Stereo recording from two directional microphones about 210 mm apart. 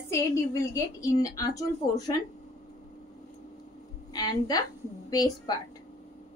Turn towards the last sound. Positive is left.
turn(degrees=20)  # may be behind; listen again after turning